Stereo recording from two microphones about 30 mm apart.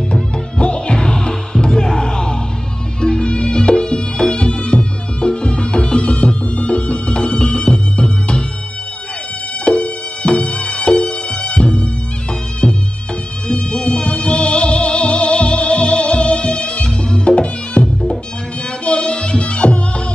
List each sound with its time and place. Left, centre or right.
0.1 s music: left
9.7 s music: left
13.5 s music: left